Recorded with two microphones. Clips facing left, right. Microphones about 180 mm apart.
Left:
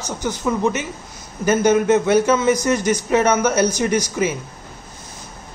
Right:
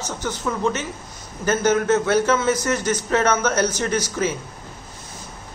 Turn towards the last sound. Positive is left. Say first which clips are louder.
# left 3 dB
turn(degrees=15)  # may be behind; listen again after turning